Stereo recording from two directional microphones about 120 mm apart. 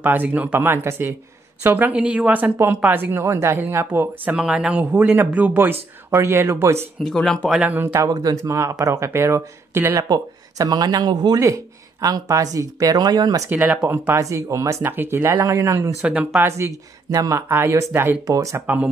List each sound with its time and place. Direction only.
0.0 s speech: 15° right (ahead or behind)
7.0 s speech: 5° left (ahead or behind)
7.5 s speech: 15° right (ahead or behind)
8.1 s speech: 30° right (ahead or behind)
10.0 s speech: 35° right (ahead or behind)
13.5 s speech: 20° right (ahead or behind)
16.0 s speech: 5° right (ahead or behind)
16.4 s speech: 25° right (ahead or behind)